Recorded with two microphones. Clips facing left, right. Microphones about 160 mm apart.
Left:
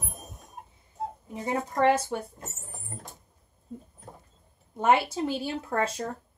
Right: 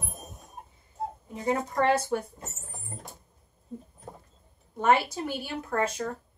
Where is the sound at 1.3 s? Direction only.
20° left (ahead or behind).